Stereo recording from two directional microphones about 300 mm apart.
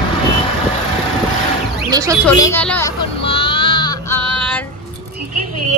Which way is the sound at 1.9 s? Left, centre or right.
Centre.